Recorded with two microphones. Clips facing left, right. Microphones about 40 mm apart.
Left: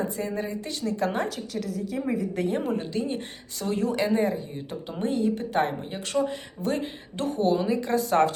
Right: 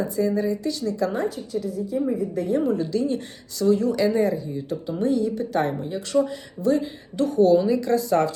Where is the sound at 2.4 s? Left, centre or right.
Left.